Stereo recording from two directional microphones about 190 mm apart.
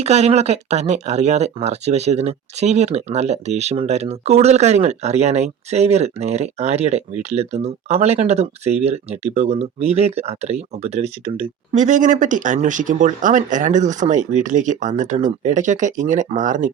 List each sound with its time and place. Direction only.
0.0 s speech: 35° right (ahead or behind)